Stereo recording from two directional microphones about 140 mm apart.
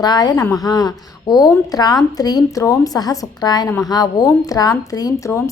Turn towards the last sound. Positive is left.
turn(degrees=20)  # may be behind; listen again after turning